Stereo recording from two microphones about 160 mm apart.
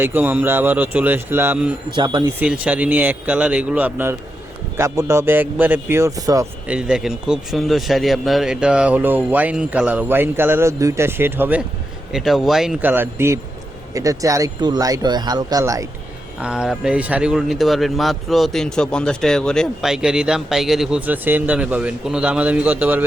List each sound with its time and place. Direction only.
0.0 s speech: 10° right (ahead or behind)
2.0 s speech: 30° right (ahead or behind)
2.4 s speech: 10° right (ahead or behind)
6.7 s speech: 5° right (ahead or behind)
12.1 s speech: centre (ahead or behind); by 15.9 s 20° right (ahead or behind)
16.4 s speech: 5° right (ahead or behind)